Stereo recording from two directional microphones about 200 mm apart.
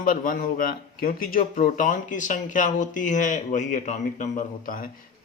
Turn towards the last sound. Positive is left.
turn(degrees=45)  # may be behind; listen again after turning